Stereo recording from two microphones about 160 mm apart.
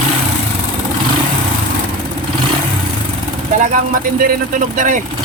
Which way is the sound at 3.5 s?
55° right (ahead or behind).